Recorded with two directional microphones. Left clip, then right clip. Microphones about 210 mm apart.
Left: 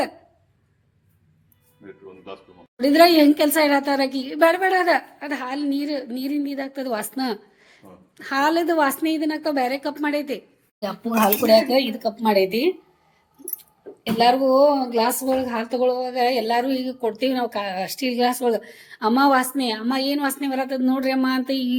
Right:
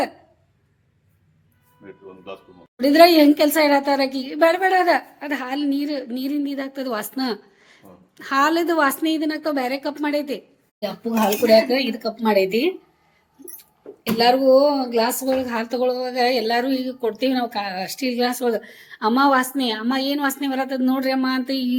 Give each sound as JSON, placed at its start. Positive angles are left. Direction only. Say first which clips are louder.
{"t": 1.8, "sound": "a woman's voice", "louder": "right 1 dB", "side_deg": -5}